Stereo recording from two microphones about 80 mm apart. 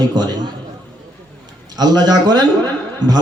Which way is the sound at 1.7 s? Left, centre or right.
Right.